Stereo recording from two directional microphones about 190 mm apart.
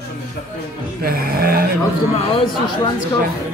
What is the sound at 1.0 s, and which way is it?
Music, 50° right (ahead or behind).